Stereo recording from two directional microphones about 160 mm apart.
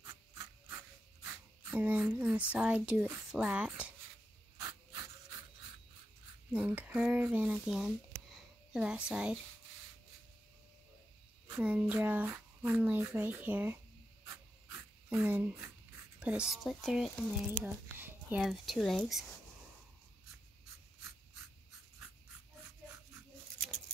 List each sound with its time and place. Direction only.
0.0 s rub: 20° right (ahead or behind)
1.2 s speech: 10° right (ahead or behind)
4.6 s a sound: 20° right (ahead or behind)
6.5 s speech: 10° right (ahead or behind)
11.4 s speech: 10° right (ahead or behind)
14.2 s a sound: 20° right (ahead or behind)
16.2 s speech: 5° right (ahead or behind)
17.5 s a child's voice: 10° right (ahead or behind)
18.4 s speech: centre (ahead or behind)